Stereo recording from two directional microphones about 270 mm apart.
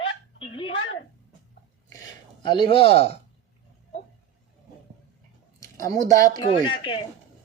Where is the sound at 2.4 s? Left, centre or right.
Centre.